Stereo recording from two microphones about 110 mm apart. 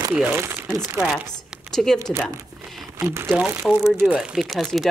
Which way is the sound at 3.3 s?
10° right (ahead or behind).